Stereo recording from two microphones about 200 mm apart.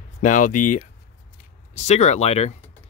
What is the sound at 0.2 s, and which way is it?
Speech, 40° left (ahead or behind).